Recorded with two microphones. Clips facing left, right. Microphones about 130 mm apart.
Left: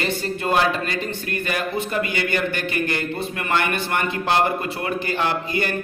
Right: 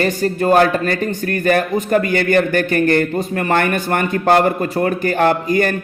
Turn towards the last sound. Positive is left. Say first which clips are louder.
# right 8 dB
turn(degrees=-45)  # may be behind; listen again after turning